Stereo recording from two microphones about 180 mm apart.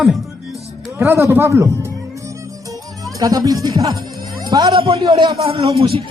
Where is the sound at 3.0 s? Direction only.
20° right (ahead or behind).